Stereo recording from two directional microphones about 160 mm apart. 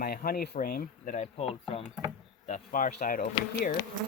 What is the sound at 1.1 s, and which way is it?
Speech, 45° left (ahead or behind).